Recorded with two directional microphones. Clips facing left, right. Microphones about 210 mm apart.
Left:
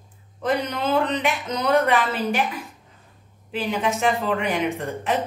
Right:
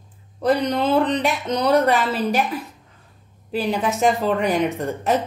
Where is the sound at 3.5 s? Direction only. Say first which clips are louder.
Right 2 dB; 40° right (ahead or behind).